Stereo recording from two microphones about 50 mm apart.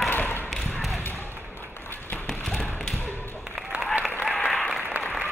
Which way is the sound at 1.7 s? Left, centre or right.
Left.